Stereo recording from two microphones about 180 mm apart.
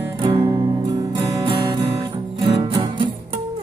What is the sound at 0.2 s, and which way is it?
Music, 25° right (ahead or behind).